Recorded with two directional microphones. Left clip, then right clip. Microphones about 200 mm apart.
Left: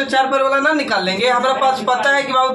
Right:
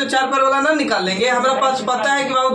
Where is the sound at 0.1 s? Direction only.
20° left (ahead or behind).